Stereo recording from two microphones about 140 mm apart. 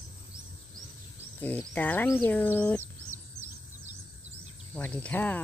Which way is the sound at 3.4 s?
20° right (ahead or behind).